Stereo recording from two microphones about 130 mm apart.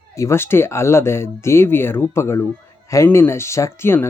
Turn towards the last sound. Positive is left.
turn(degrees=20)  # may be behind; listen again after turning